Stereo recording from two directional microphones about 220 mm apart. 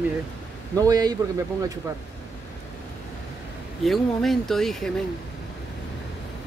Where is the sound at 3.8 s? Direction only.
Centre (ahead or behind).